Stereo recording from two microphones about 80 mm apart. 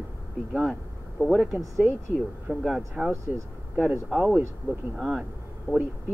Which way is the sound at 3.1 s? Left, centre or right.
Right.